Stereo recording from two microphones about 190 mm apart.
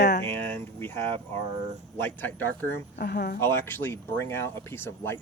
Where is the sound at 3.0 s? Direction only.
55° left (ahead or behind).